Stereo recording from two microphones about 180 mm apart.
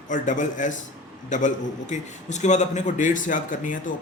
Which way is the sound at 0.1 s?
45° left (ahead or behind).